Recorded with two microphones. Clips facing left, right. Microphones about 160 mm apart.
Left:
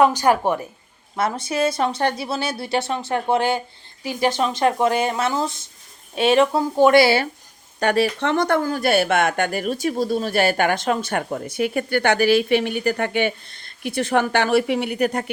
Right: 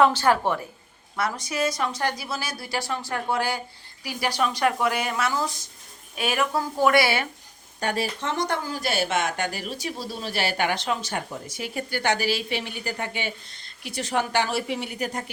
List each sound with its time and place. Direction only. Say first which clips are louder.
0.0 s speech: left 3 dB; 15° left (ahead or behind)
1.1 s a woman's voice: left 5 dB; 25° left (ahead or behind)
7.8 s speech: left 8 dB; 70° left (ahead or behind)